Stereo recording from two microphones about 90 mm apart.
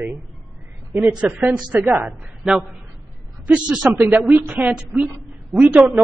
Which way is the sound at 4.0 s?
20° right (ahead or behind).